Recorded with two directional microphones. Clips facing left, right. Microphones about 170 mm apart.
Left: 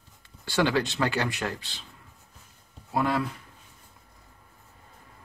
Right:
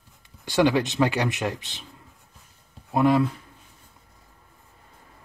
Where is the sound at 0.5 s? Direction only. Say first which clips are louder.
Right 4 dB; 15° right (ahead or behind).